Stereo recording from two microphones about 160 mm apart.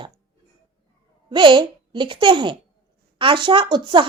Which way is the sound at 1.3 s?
30° right (ahead or behind).